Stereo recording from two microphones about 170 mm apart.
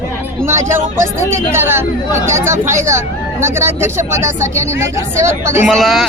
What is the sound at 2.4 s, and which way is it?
Speech, 50° right (ahead or behind).